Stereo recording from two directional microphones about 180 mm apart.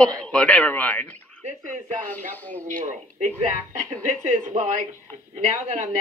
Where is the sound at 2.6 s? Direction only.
45° right (ahead or behind).